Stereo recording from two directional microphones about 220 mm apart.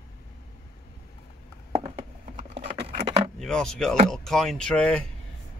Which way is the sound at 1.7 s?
20° right (ahead or behind).